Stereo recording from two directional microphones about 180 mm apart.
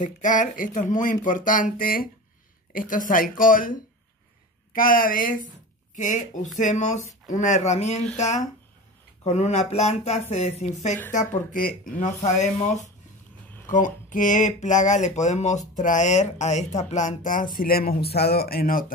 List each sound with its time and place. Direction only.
0.0 s speech: 45° left (ahead or behind)
4.7 s speech: 50° left (ahead or behind)
17.6 s speech: 55° left (ahead or behind)